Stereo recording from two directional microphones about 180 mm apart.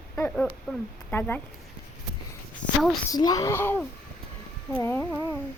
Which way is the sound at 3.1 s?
20° left (ahead or behind).